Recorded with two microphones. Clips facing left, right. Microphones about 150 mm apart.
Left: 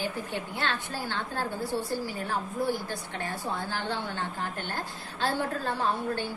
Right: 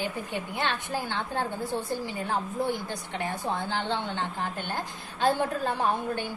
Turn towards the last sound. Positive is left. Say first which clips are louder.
# right 1 dB
turn(degrees=-15)  # may be behind; listen again after turning